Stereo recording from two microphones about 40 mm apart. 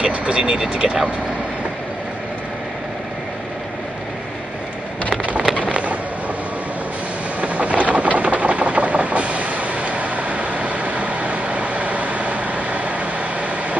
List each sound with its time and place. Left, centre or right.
0.0 s speech: right
5.7 s a sound: right
7.4 s vehicle: right